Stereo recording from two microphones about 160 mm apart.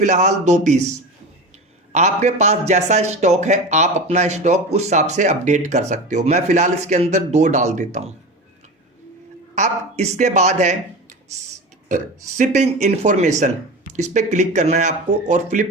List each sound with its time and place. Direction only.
0.0 s a man's voice: 50° right (ahead or behind)
1.9 s a man's voice: 45° right (ahead or behind)
9.6 s a man's voice: 45° right (ahead or behind)
11.9 s a man's voice: 50° right (ahead or behind)